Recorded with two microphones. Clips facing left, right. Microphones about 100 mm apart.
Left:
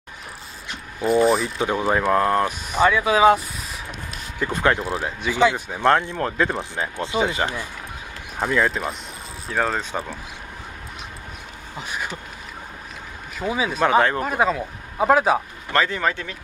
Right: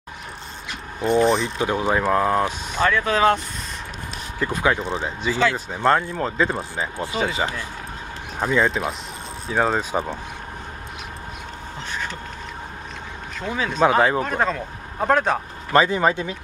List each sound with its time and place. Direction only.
1.0 s speech: 5° left (ahead or behind)
2.7 s speech: 10° left (ahead or behind)
4.5 s speech: 5° right (ahead or behind)
4.8 s speech: 10° left (ahead or behind)
5.9 s speech: 10° right (ahead or behind)
7.0 s speech: 20° left (ahead or behind)
8.4 s speech: centre (ahead or behind); by 10.1 s 15° right (ahead or behind)
11.9 s a sound: 10° left (ahead or behind)
13.4 s speech: 5° left (ahead or behind)
14.2 s speech: 5° left (ahead or behind)
15.7 s speech: 15° right (ahead or behind)